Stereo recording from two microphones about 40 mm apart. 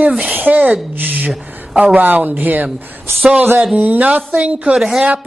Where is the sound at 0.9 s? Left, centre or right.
Right.